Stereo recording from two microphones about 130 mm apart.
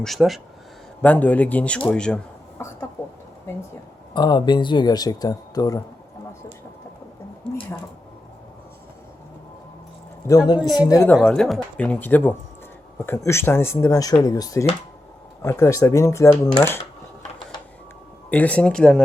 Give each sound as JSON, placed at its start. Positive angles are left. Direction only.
{"t": 0.0, "sound": "speech", "side_deg": 0}
{"t": 1.0, "sound": "speech", "side_deg": 10}
{"t": 2.6, "sound": "speech", "side_deg": 20}
{"t": 4.1, "sound": "speech", "side_deg": 35}
{"t": 7.4, "sound": "a sound", "side_deg": 10}
{"t": 10.2, "sound": "speech", "side_deg": 30}
{"t": 11.3, "sound": "speech", "side_deg": 5}
{"t": 18.3, "sound": "speech", "side_deg": 10}